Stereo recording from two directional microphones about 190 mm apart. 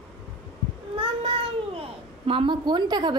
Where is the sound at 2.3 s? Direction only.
25° right (ahead or behind).